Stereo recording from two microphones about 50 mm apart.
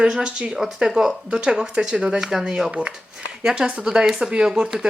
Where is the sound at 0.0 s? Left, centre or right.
Centre.